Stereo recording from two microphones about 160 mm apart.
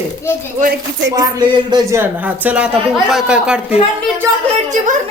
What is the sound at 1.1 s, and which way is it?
Music, 25° right (ahead or behind).